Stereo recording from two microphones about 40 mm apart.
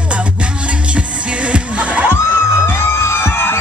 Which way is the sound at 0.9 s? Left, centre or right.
Right.